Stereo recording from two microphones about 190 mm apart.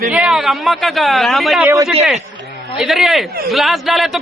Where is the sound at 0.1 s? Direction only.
5° right (ahead or behind).